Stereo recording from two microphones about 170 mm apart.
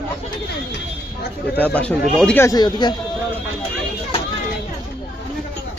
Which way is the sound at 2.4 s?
25° left (ahead or behind).